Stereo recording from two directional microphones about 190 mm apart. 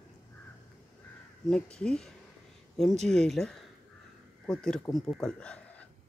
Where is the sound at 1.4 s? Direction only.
5° left (ahead or behind).